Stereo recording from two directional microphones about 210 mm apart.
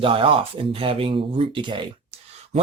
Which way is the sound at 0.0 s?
25° right (ahead or behind).